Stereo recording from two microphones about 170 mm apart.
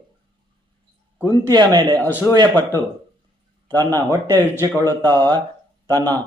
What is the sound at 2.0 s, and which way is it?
Speech, 10° left (ahead or behind).